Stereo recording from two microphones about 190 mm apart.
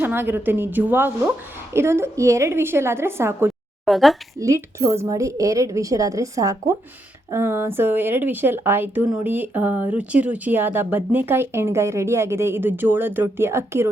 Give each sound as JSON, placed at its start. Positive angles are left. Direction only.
{"t": 0.0, "sound": "speech", "side_deg": -10}
{"t": 3.8, "sound": "speech", "side_deg": 0}
{"t": 4.4, "sound": "speech", "side_deg": -15}